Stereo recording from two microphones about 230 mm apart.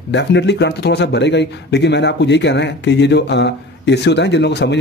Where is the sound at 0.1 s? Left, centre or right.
Left.